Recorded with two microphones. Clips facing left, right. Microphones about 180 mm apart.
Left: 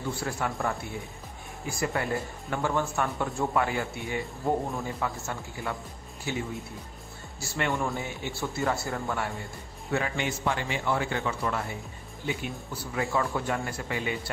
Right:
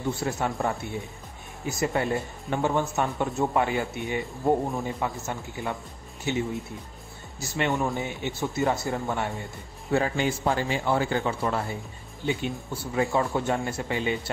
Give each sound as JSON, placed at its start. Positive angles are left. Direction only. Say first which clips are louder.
{"t": 0.2, "sound": "speech", "louder": "right 3 dB", "side_deg": -25}
{"t": 9.9, "sound": "a man's voice", "louder": "right 5 dB", "side_deg": -35}